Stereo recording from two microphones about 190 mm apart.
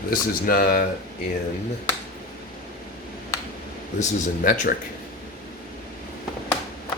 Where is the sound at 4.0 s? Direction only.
45° left (ahead or behind).